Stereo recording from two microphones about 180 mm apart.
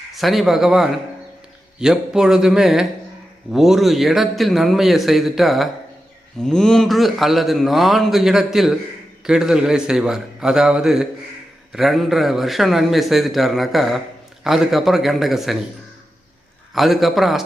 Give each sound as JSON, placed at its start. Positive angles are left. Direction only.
{"t": 0.1, "sound": "a man's voice", "side_deg": 0}
{"t": 16.7, "sound": "a man's voice", "side_deg": 0}